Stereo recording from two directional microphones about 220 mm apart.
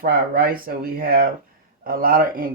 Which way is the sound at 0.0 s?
40° right (ahead or behind).